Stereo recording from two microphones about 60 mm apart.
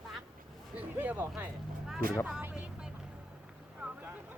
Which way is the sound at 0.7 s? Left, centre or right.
Right.